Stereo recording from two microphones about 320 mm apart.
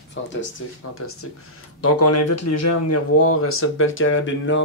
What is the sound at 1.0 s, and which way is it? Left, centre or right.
Speech, left.